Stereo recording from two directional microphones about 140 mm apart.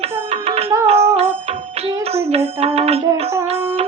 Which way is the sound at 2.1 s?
45° right (ahead or behind).